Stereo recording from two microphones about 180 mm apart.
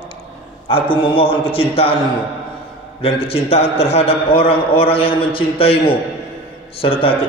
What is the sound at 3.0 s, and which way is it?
A man's voice, 30° left (ahead or behind).